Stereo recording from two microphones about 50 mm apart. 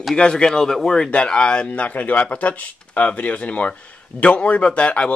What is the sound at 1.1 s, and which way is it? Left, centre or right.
Speech, centre.